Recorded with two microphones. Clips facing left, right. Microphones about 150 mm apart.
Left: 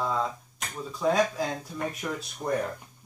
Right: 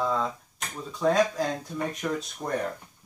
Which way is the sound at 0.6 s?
Centre (ahead or behind).